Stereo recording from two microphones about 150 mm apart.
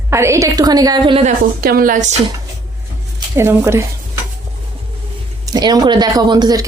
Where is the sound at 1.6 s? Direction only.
80° right.